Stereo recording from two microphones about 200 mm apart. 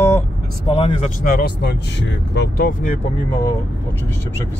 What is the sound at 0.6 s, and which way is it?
Speech, 25° left (ahead or behind).